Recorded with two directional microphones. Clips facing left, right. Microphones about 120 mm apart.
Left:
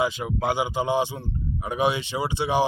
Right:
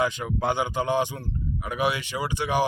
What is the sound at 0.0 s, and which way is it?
A man's voice, 15° left (ahead or behind).